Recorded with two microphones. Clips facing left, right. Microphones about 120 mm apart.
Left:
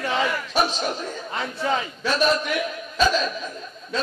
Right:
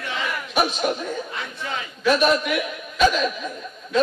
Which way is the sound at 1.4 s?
30° left (ahead or behind).